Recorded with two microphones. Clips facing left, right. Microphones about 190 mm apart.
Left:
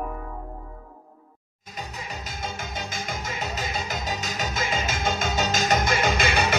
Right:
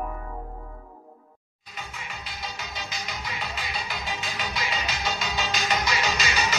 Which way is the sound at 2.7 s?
50° left (ahead or behind).